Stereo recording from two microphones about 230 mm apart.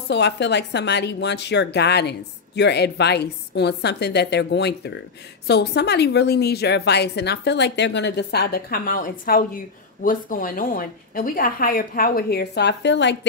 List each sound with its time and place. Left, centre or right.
0.1 s speech: left